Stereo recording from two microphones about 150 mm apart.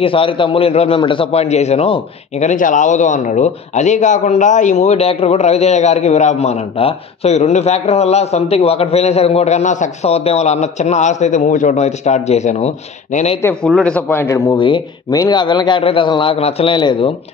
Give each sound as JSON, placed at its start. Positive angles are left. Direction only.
{"t": 0.0, "sound": "a man's voice", "side_deg": 35}
{"t": 2.4, "sound": "a man's voice", "side_deg": 60}
{"t": 13.7, "sound": "a man's voice", "side_deg": 5}